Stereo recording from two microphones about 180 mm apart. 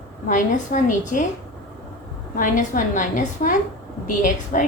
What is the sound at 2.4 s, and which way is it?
A woman's voice, 45° left (ahead or behind).